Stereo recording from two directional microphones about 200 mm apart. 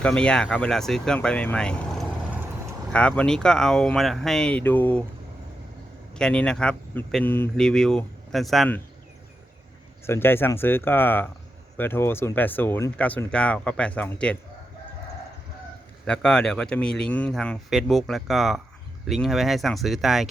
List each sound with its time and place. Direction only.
0.0 s speech: 5° left (ahead or behind)
6.1 s speech: 5° left (ahead or behind)
10.1 s speech: 10° left (ahead or behind)
16.0 s speech: 5° left (ahead or behind)